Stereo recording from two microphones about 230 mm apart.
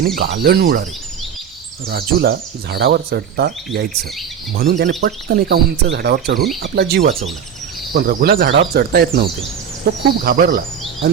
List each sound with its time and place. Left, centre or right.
0.2 s speech: right
1.9 s speech: right
4.5 s speech: right